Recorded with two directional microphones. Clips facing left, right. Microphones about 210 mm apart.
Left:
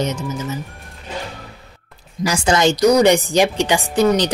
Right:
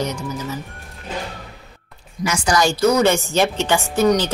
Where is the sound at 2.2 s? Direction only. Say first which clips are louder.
Left 3 dB; 35° left (ahead or behind).